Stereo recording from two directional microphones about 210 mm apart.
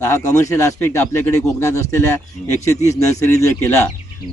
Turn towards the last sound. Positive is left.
turn(degrees=10)  # may be behind; listen again after turning